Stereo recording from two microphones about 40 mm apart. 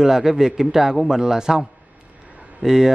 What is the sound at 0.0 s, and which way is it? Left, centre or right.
A man's voice, centre.